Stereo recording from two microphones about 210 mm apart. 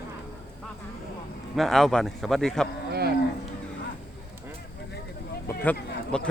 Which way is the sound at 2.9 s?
50° right (ahead or behind).